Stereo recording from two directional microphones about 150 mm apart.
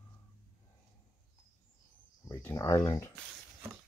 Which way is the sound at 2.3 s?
20° left (ahead or behind).